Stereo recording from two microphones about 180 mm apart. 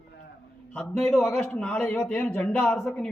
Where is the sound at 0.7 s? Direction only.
5° left (ahead or behind).